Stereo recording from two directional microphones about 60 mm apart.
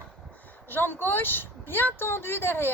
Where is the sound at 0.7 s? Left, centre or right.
Left.